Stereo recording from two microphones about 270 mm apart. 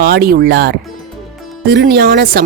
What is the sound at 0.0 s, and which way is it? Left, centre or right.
Speech, right.